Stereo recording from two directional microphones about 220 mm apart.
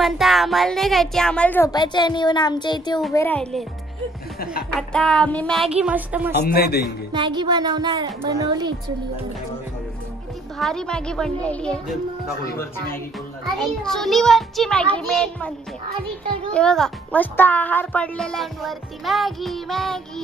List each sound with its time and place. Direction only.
0.0 s a woman's voice: centre (ahead or behind)
4.7 s speech: 5° left (ahead or behind)
6.4 s a man's voice: 45° left (ahead or behind)
7.1 s a woman's voice: 20° right (ahead or behind)
10.6 s speech: 5° left (ahead or behind)
13.6 s speech: centre (ahead or behind)
16.5 s speech: 5° left (ahead or behind)